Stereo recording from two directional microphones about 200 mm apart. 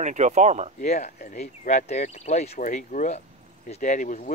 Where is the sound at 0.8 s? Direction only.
35° left (ahead or behind).